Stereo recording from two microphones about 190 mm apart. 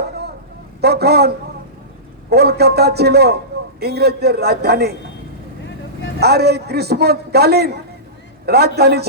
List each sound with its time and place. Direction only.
0.8 s a man's voice: 55° right (ahead or behind)
2.3 s a man's voice: 55° right (ahead or behind)
6.1 s a man's voice: 55° right (ahead or behind)